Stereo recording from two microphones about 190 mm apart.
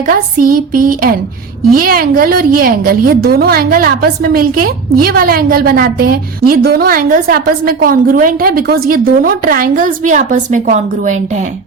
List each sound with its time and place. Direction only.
0.1 s a woman's voice: 50° right (ahead or behind)